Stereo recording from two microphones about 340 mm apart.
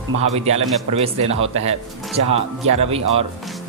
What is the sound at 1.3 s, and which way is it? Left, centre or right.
Speech, right.